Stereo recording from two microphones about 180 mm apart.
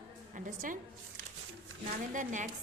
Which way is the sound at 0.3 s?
50° right (ahead or behind).